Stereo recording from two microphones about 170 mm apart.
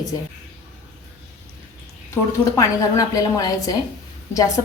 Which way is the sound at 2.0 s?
20° left (ahead or behind).